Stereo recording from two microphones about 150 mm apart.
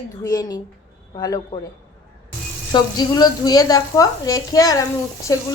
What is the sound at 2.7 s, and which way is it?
Speech, 25° left (ahead or behind).